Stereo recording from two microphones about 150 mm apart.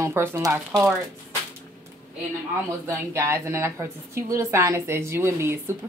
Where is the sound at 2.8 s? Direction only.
20° right (ahead or behind).